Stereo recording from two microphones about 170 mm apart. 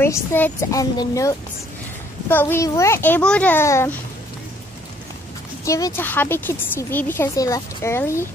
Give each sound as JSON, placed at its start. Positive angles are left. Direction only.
{"t": 0.0, "sound": "a woman's voice", "side_deg": 15}
{"t": 5.7, "sound": "a woman's voice", "side_deg": 20}